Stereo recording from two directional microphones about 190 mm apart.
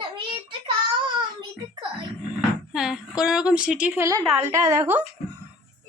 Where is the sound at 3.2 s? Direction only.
5° right (ahead or behind).